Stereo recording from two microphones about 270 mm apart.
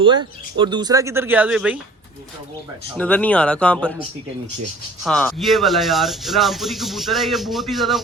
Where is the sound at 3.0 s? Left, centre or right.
Centre.